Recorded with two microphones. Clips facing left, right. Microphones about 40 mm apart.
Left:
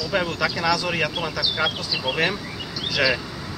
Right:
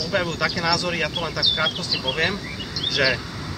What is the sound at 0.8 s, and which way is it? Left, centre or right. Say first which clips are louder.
Speech: even; centre.